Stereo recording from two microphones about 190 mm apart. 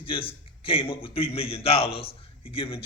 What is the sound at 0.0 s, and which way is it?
A man's voice, 30° left (ahead or behind).